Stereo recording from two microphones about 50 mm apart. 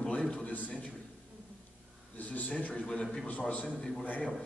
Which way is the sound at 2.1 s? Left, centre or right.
Left.